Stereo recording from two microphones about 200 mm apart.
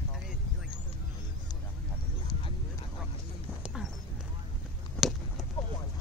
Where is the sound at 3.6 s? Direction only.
Centre (ahead or behind).